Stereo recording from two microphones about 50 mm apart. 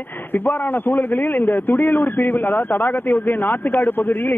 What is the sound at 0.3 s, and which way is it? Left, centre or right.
A man's voice, left.